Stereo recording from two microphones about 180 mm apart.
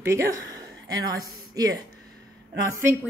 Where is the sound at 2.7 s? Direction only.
15° right (ahead or behind).